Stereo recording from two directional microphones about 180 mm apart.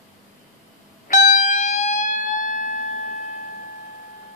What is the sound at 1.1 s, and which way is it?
Music, 45° left (ahead or behind).